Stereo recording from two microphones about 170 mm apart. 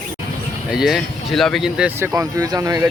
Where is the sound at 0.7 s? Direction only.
5° right (ahead or behind).